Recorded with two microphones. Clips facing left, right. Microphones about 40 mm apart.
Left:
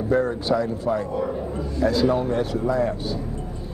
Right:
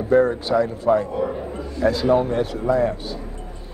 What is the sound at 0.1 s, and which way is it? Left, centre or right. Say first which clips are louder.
A man's voice: right 5 dB; right.